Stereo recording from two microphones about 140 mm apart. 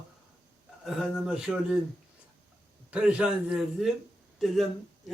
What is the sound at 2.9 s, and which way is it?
Speech, 5° right (ahead or behind).